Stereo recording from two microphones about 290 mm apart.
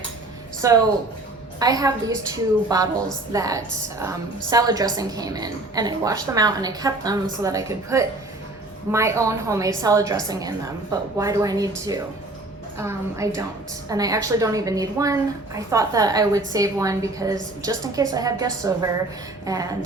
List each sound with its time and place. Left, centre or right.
0.6 s a woman's voice: centre